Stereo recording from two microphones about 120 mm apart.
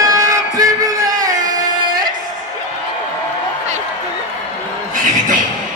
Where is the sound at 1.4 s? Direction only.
30° right (ahead or behind).